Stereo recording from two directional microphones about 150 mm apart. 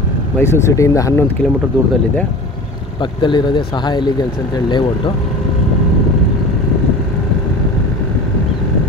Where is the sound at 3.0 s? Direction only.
30° left (ahead or behind).